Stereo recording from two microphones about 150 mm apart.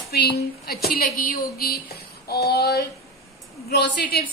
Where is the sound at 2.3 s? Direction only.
90° left.